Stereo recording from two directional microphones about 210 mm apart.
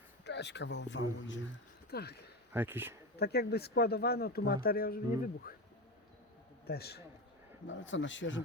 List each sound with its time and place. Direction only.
0.3 s speech: 55° left (ahead or behind)
1.9 s speech: 50° left (ahead or behind)
2.5 s speech: 10° right (ahead or behind)
3.2 s speech: 50° left (ahead or behind)
6.7 s speech: 50° left (ahead or behind)
7.7 s speech: 60° left (ahead or behind)